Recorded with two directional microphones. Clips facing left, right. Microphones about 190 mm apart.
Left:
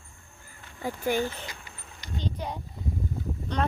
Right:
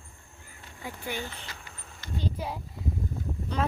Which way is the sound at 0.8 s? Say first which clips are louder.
Left 9 dB; 45° left (ahead or behind).